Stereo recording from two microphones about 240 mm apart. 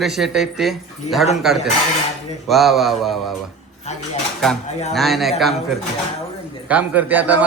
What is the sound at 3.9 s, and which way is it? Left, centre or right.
Dishes, left.